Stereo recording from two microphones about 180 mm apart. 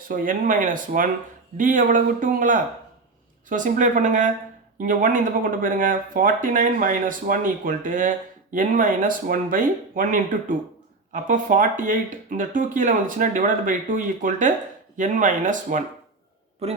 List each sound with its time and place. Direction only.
0.1 s speech: 50° right (ahead or behind)
16.6 s a man's voice: 35° right (ahead or behind)